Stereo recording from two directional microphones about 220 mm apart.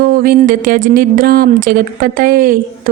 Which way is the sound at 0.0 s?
40° right (ahead or behind).